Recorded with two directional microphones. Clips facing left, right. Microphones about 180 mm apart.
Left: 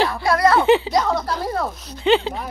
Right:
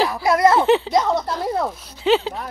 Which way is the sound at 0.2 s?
20° right (ahead or behind).